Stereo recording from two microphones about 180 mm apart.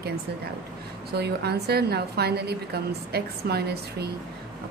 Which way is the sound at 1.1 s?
65° right (ahead or behind).